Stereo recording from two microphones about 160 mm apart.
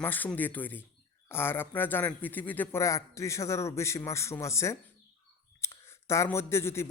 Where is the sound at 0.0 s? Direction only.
10° left (ahead or behind).